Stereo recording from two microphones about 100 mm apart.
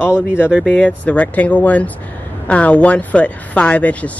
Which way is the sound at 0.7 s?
15° left (ahead or behind).